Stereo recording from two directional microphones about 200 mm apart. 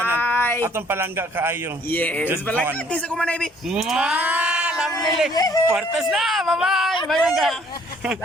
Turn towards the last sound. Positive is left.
turn(degrees=0)  # may be behind; listen again after turning